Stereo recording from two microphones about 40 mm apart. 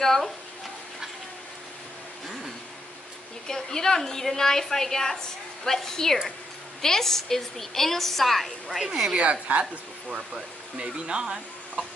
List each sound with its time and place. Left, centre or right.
0.0 s a woman's voice: centre
3.4 s a woman's voice: centre
9.1 s a woman's voice: right
10.0 s speech: centre